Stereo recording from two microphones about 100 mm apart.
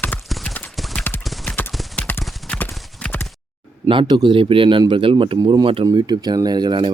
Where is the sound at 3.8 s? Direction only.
50° right (ahead or behind).